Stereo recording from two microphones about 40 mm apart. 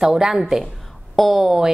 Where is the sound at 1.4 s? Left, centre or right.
Centre.